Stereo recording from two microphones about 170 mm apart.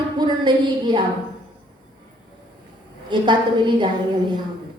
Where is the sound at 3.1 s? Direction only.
25° right (ahead or behind).